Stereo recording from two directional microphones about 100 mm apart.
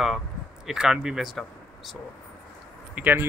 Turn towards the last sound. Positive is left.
turn(degrees=-20)  # may be behind; listen again after turning